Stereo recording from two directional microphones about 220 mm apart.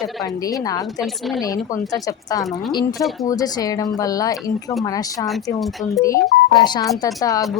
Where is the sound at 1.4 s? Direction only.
15° left (ahead or behind).